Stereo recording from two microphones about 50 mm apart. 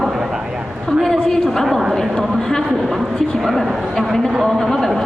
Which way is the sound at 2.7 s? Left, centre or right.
Centre.